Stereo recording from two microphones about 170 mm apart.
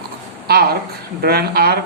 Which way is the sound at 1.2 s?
65° right (ahead or behind).